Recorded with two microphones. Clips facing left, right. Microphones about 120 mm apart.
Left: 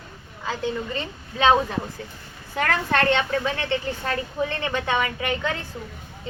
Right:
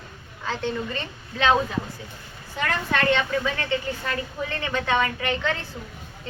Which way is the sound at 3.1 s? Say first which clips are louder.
Left 1 dB; 20° left (ahead or behind).